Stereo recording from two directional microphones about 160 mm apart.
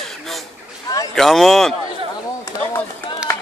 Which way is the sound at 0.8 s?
25° left (ahead or behind).